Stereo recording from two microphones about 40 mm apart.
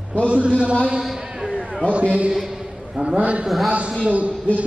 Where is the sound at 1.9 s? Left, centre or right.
Right.